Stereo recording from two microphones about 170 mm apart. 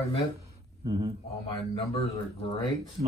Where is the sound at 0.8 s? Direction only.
35° right (ahead or behind).